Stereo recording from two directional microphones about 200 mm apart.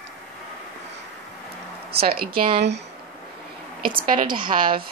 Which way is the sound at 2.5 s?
60° right (ahead or behind).